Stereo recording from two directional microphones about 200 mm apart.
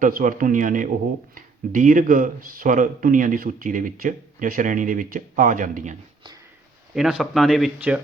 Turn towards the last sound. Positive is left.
turn(degrees=-5)  # may be behind; listen again after turning